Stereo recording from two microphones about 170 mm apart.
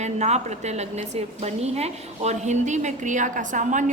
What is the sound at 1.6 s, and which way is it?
A woman's voice, 40° right (ahead or behind).